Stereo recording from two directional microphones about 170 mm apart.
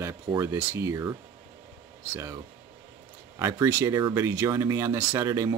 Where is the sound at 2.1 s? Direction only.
20° right (ahead or behind).